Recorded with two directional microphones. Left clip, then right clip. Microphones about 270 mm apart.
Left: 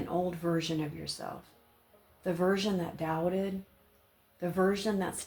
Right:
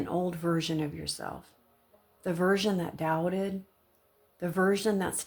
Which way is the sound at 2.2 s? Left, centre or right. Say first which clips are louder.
Right 2 dB; right.